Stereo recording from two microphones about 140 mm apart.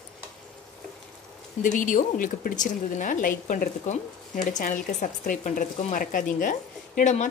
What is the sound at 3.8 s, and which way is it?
Speech, 60° left (ahead or behind).